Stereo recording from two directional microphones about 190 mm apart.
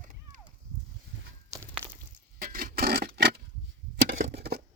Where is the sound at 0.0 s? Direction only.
40° right (ahead or behind).